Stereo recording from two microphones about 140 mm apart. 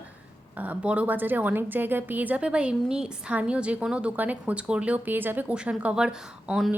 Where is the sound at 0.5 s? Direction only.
10° right (ahead or behind).